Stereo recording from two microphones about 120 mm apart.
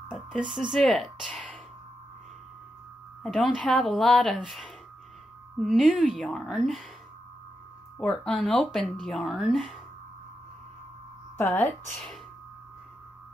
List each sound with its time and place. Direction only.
0.5 s speech: centre (ahead or behind)
3.3 s speech: centre (ahead or behind)
5.6 s a woman's voice: centre (ahead or behind)
6.1 s speech: centre (ahead or behind)
8.0 s speech: 5° left (ahead or behind)
11.3 s speech: 20° left (ahead or behind)